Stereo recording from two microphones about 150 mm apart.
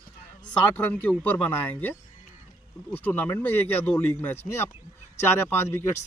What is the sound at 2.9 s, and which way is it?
Speech, 10° left (ahead or behind).